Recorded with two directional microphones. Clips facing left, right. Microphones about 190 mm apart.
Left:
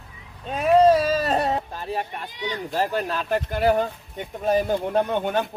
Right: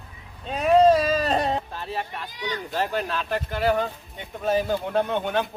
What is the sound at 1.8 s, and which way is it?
Speech, 45° left (ahead or behind).